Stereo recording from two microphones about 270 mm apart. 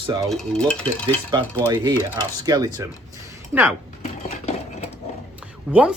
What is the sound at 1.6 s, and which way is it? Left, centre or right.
Speech, centre.